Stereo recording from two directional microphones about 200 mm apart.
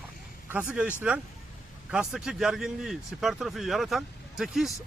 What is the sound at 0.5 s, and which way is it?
Speech, 5° right (ahead or behind).